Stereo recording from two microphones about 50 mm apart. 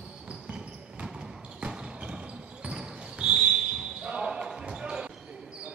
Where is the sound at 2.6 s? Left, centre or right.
Centre.